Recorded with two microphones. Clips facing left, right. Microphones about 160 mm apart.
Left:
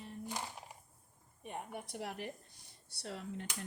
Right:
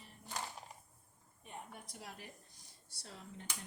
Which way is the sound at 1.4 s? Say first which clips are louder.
Left 7 dB; 65° left (ahead or behind).